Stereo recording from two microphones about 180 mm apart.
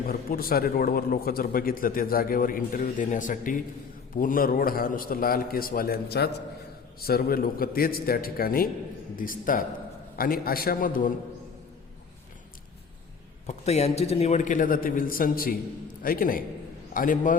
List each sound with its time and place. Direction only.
0.1 s a man's voice: 55° left (ahead or behind)
13.5 s a man's voice: 35° left (ahead or behind)